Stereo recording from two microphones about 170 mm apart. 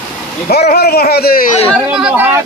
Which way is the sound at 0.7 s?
65° left (ahead or behind).